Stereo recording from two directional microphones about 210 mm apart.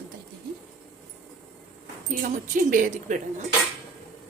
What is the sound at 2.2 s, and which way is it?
Speech, 40° right (ahead or behind).